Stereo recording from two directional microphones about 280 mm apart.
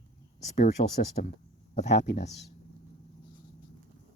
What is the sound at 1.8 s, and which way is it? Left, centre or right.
Speech, left.